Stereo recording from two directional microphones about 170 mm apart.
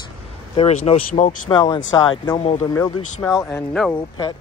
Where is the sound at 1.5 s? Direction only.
25° left (ahead or behind).